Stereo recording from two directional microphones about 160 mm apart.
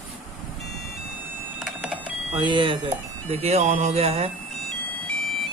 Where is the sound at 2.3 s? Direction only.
30° right (ahead or behind).